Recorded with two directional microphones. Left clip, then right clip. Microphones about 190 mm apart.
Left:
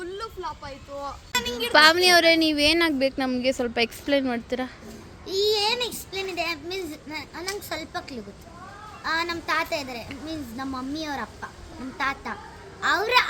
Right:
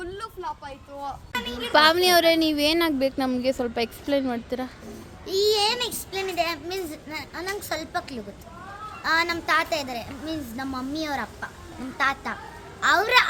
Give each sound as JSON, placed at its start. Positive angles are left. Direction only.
{"t": 1.3, "sound": "a woman's voice", "side_deg": 50}
{"t": 1.7, "sound": "speech", "side_deg": 0}
{"t": 5.2, "sound": "a child's voice", "side_deg": -10}